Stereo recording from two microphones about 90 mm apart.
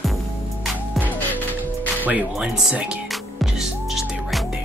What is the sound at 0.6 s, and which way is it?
Music, 5° right (ahead or behind).